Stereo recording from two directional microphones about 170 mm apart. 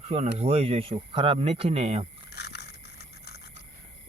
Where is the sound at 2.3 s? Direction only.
75° left (ahead or behind).